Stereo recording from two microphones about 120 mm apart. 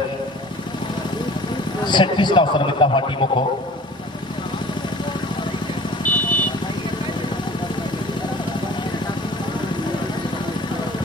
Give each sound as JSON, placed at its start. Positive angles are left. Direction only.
{"t": 1.9, "sound": "a man's voice", "side_deg": 40}
{"t": 6.0, "sound": "vehicle", "side_deg": 15}